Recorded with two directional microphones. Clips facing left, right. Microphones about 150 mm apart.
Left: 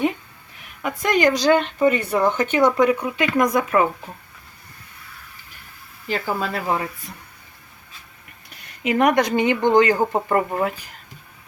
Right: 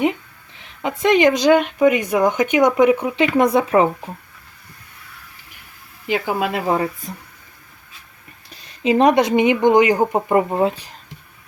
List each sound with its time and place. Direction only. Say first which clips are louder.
0.6 s speech: right 5 dB; 25° right (ahead or behind)
6.1 s speech: right 4 dB; 15° right (ahead or behind)
8.4 s speech: right 5 dB; 30° right (ahead or behind)